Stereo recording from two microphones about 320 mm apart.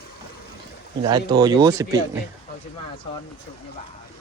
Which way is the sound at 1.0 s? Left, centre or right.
Centre.